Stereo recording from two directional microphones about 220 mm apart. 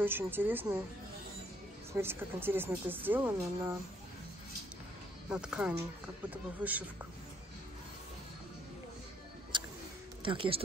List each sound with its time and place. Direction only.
0.0 s speech: 10° right (ahead or behind)
2.0 s speech: 10° right (ahead or behind)
5.3 s speech: 5° right (ahead or behind)
9.5 s music: 20° right (ahead or behind)
10.2 s speech: 25° right (ahead or behind)